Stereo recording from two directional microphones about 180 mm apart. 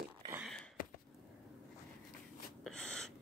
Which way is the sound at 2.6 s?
5° left (ahead or behind).